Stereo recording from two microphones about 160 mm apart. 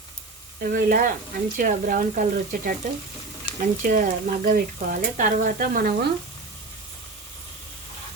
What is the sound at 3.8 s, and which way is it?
Speech, 60° right (ahead or behind).